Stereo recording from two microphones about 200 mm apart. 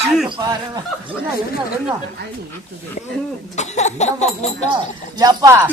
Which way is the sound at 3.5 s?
35° left (ahead or behind).